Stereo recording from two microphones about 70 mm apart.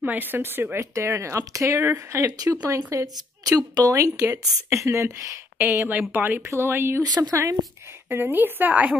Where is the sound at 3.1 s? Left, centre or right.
Right.